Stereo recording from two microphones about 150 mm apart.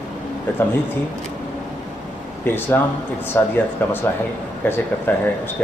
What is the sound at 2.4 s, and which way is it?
A man's voice, 15° left (ahead or behind).